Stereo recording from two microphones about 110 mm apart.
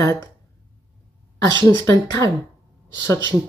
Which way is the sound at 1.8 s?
25° left (ahead or behind).